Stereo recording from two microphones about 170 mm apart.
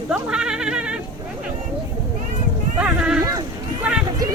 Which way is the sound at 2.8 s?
5° right (ahead or behind).